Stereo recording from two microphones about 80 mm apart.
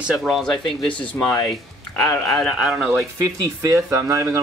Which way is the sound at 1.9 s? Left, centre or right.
Left.